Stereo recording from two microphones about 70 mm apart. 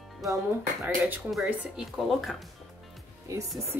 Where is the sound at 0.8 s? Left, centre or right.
Right.